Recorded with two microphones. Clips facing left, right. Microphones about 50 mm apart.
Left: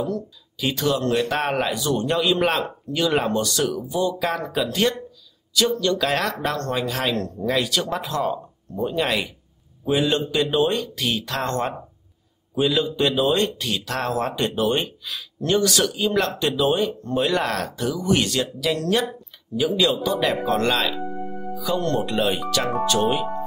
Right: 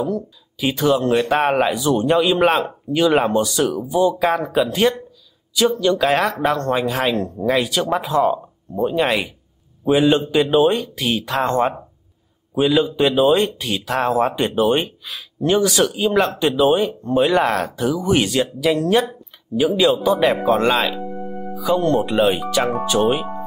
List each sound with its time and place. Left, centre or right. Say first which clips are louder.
0.6 s a man's voice: right 5 dB; centre